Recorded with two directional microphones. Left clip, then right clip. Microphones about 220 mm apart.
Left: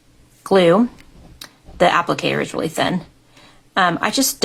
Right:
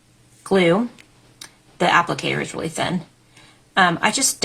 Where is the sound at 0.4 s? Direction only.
40° left (ahead or behind).